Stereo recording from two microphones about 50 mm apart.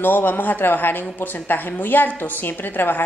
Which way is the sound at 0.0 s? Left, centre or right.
Left.